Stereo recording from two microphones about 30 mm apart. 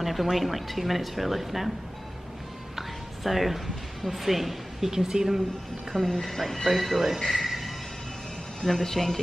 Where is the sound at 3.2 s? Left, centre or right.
Centre.